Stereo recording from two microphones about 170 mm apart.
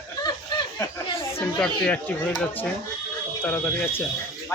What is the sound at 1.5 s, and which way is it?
Speech, 5° left (ahead or behind).